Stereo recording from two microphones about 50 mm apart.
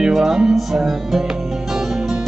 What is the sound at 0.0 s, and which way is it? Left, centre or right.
Music, centre.